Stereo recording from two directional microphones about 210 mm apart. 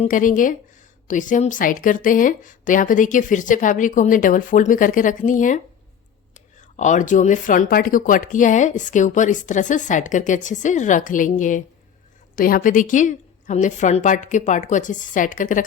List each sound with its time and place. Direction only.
0.0 s speech: 40° left (ahead or behind)